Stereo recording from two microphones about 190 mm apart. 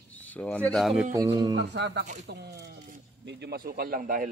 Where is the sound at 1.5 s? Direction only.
65° right (ahead or behind).